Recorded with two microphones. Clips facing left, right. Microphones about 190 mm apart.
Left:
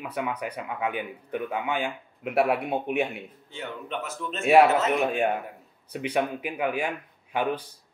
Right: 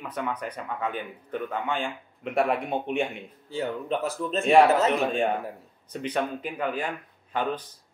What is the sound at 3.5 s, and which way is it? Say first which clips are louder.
Speech: right 6 dB; 35° right (ahead or behind).